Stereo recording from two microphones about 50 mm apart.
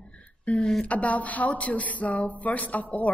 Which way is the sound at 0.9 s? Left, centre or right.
Left.